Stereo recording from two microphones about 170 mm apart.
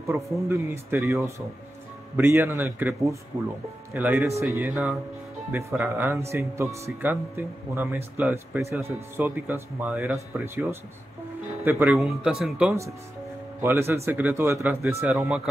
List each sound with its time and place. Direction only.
0.0 s speech: 15° right (ahead or behind)